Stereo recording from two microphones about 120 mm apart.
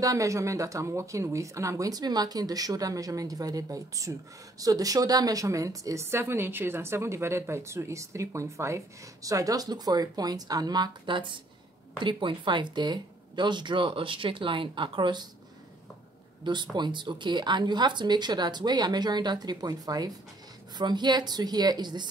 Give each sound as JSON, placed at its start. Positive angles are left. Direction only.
{"t": 0.0, "sound": "a woman's voice", "side_deg": -25}
{"t": 16.7, "sound": "speech", "side_deg": -40}